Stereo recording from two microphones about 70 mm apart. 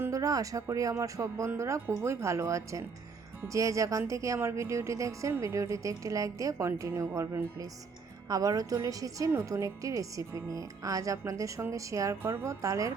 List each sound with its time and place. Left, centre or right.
0.1 s a woman's voice: right
6.7 s speech: right
8.3 s a woman's voice: right
12.6 s a woman's voice: right